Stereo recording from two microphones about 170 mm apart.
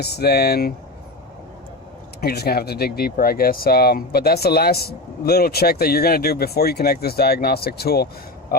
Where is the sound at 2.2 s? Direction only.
65° left (ahead or behind).